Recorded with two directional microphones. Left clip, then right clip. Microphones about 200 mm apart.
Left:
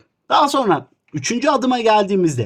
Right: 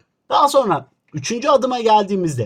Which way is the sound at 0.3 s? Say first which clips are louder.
Right 1 dB; 30° left (ahead or behind).